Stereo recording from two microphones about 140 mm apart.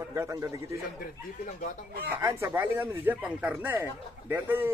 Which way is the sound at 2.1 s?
20° right (ahead or behind).